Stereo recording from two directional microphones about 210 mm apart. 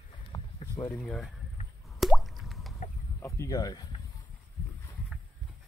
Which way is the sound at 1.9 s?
Centre (ahead or behind).